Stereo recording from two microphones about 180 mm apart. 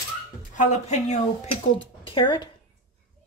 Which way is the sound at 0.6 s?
40° left (ahead or behind).